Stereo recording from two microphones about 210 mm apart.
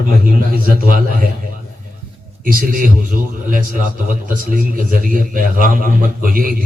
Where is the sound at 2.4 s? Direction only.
45° right (ahead or behind).